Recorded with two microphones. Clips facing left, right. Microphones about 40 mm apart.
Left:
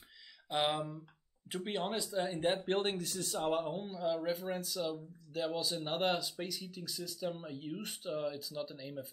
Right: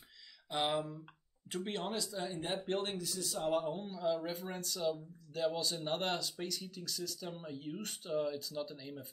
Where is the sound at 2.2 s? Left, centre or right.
Left.